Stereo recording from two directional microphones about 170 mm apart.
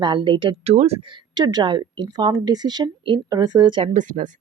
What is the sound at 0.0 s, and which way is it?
Speech, 30° right (ahead or behind).